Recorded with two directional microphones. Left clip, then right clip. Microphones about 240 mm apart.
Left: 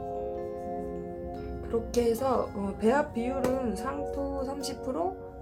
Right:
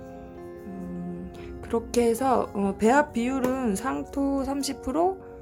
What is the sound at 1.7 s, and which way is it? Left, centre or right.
Speech, right.